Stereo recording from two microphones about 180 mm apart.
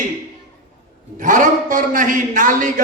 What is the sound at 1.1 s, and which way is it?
A man's voice, 45° right (ahead or behind).